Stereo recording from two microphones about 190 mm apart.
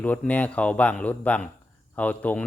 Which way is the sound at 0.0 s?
5° left (ahead or behind).